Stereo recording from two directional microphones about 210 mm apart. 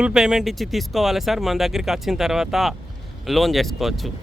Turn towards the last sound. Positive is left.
turn(degrees=0)  # may be behind; listen again after turning